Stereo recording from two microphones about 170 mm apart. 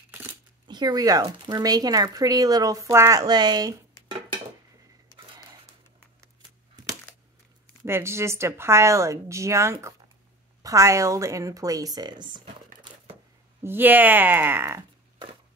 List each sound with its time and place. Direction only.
0.1 s a sound: 15° right (ahead or behind)
0.7 s speech: 25° right (ahead or behind)
7.8 s speech: 15° right (ahead or behind)
13.6 s speech: 10° right (ahead or behind)